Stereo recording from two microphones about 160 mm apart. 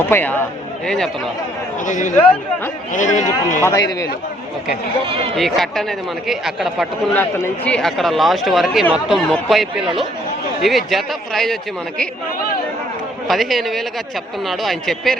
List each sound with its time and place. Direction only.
0.1 s speech: 15° left (ahead or behind)
1.8 s a man's voice: 50° left (ahead or behind)
3.6 s speech: 20° left (ahead or behind)
5.0 s speech: 35° right (ahead or behind)
5.4 s speech: centre (ahead or behind)
7.1 s speech: 10° left (ahead or behind)
13.2 s speech: centre (ahead or behind)